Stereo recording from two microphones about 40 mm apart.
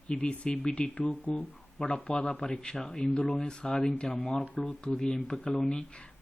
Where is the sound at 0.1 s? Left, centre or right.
Left.